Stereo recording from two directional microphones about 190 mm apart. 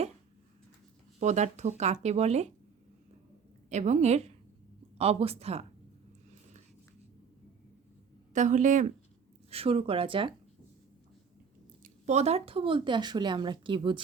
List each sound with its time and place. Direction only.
1.2 s speech: 35° right (ahead or behind)
3.7 s speech: 40° right (ahead or behind)
8.3 s speech: 40° right (ahead or behind)
11.8 s speech: 35° right (ahead or behind)